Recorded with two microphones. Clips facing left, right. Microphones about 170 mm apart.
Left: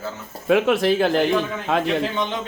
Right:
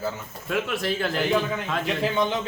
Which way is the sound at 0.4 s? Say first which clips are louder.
Left 9 dB; 65° left (ahead or behind).